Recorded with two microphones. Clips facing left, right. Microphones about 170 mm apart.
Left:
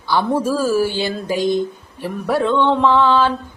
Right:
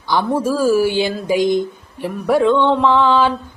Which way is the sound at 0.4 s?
10° right (ahead or behind).